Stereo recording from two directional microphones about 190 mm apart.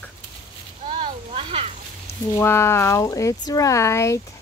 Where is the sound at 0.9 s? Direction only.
30° right (ahead or behind).